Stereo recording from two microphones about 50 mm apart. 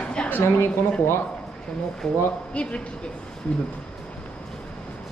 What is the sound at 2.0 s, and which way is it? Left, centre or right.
Speech, centre.